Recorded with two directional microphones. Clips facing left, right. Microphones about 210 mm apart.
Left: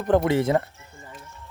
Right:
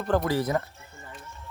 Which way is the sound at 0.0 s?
20° left (ahead or behind).